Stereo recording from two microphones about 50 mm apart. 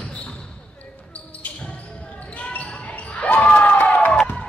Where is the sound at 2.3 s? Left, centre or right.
Left.